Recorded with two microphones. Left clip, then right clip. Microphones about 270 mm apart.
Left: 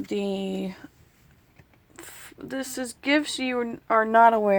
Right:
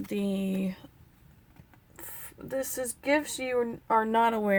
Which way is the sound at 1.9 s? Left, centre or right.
Centre.